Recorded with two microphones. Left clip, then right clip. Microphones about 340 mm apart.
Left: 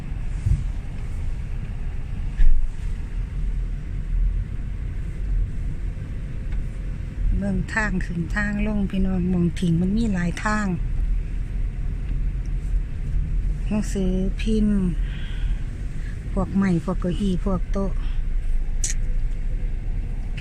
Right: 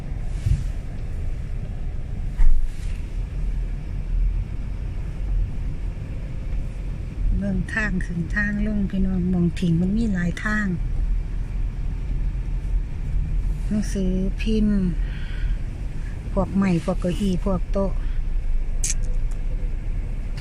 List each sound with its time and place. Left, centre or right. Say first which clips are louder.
7.4 s speech: left 1 dB; centre
13.8 s speech: left 1 dB; centre
16.3 s speech: right 1 dB; centre